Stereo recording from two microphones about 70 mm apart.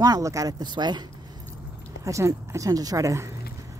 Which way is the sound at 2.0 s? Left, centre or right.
Right.